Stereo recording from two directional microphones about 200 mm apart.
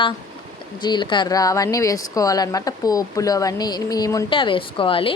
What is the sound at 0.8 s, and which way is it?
Speech, 20° left (ahead or behind).